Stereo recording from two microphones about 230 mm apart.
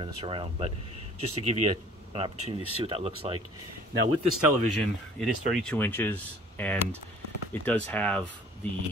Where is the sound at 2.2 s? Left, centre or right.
Right.